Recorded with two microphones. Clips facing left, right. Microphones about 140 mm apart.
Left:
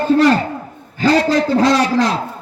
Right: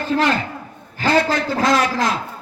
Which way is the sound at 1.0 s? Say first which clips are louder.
Left 4 dB; 35° left (ahead or behind).